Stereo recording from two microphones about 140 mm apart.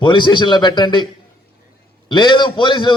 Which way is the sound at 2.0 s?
35° left (ahead or behind).